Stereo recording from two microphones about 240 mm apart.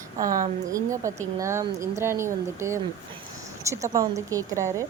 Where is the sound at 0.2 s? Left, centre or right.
Right.